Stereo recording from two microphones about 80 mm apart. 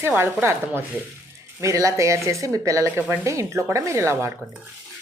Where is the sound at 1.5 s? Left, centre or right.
Right.